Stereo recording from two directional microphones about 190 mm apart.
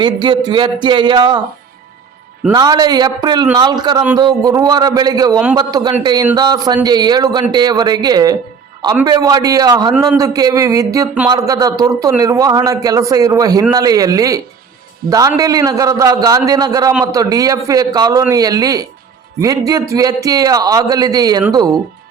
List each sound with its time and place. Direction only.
0.0 s a man's voice: 25° right (ahead or behind)
2.5 s a man's voice: 20° right (ahead or behind)